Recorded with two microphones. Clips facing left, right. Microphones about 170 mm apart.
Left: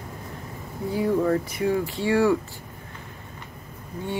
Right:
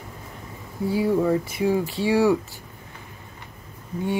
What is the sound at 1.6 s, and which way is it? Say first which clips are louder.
Speech: right 2 dB; 15° right (ahead or behind).